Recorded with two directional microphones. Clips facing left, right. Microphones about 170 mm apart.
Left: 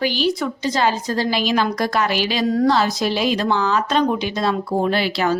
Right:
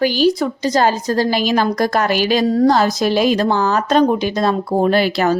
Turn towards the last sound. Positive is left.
turn(degrees=-45)  # may be behind; listen again after turning